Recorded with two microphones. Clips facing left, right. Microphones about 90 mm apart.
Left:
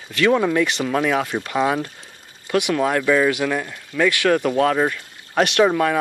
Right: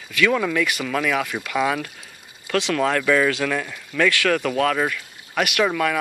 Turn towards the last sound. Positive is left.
turn(degrees=25)  # may be behind; listen again after turning